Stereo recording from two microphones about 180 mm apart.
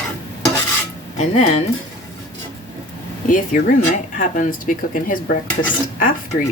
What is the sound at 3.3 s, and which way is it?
Speech, 50° left (ahead or behind).